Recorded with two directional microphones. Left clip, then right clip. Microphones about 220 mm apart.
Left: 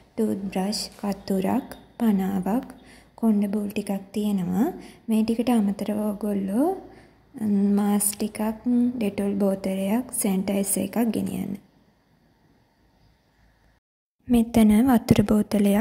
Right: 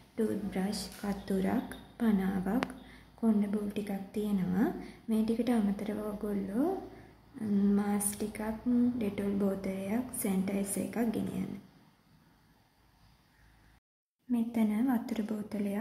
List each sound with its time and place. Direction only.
0.1 s speech: 30° left (ahead or behind)
14.3 s a woman's voice: 45° left (ahead or behind)